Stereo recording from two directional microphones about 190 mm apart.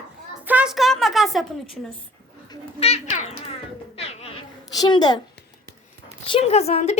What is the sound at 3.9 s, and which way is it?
Cat, 30° left (ahead or behind).